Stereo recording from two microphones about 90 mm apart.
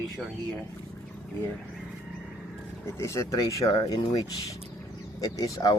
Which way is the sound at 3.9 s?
50° left (ahead or behind).